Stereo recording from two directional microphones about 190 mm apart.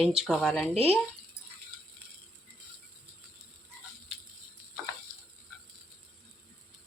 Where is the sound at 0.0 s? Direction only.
Centre (ahead or behind).